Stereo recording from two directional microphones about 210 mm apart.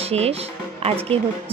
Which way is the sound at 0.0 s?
30° right (ahead or behind).